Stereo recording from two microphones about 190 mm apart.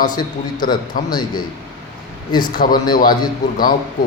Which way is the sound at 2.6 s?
40° left (ahead or behind).